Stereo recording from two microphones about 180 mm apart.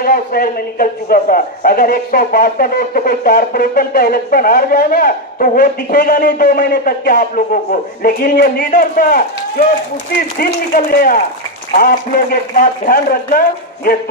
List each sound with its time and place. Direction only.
0.0 s a man's voice: 55° left (ahead or behind)
10.4 s a man's voice: 55° left (ahead or behind)